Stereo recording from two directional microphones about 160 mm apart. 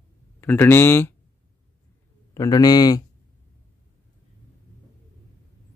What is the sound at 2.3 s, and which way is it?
Speech, 20° left (ahead or behind).